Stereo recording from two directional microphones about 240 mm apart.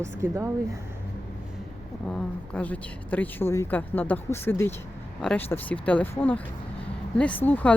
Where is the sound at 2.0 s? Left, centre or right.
Centre.